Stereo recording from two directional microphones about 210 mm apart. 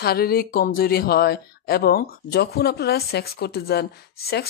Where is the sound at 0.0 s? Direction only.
45° left (ahead or behind).